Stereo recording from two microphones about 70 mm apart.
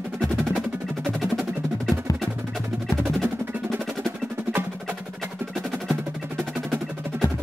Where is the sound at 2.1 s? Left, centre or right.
Left.